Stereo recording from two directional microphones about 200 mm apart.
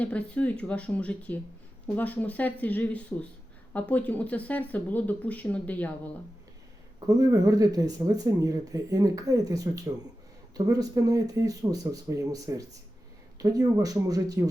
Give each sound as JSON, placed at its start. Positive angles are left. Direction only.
{"t": 0.0, "sound": "speech", "side_deg": 5}
{"t": 7.1, "sound": "speech", "side_deg": -15}